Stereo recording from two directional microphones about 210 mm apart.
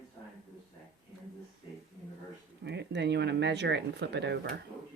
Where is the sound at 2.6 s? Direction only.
55° right (ahead or behind).